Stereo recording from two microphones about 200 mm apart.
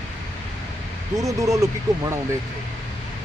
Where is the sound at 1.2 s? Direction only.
15° right (ahead or behind).